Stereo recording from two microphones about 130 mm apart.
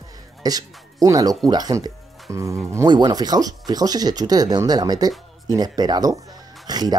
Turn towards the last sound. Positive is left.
turn(degrees=-30)  # may be behind; listen again after turning